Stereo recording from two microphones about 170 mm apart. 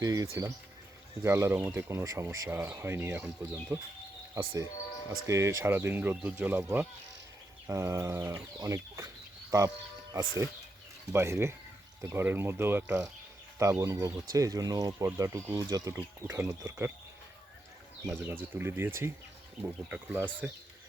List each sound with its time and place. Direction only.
0.0 s speech: 20° right (ahead or behind)
18.0 s speech: 15° right (ahead or behind)